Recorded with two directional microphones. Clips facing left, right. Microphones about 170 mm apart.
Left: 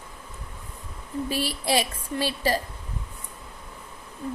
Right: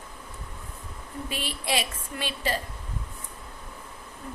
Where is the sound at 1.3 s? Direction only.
35° left (ahead or behind).